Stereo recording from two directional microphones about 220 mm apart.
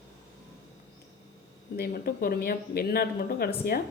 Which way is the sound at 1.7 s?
45° left (ahead or behind).